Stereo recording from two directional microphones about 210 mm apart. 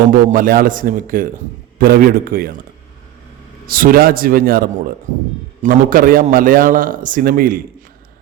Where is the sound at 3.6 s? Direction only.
45° right (ahead or behind).